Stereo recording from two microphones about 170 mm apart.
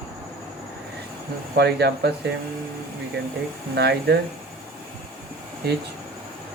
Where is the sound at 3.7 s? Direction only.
75° right (ahead or behind).